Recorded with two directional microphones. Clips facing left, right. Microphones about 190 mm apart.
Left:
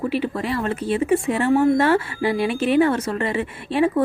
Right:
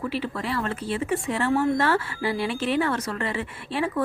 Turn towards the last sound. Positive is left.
turn(degrees=20)  # may be behind; listen again after turning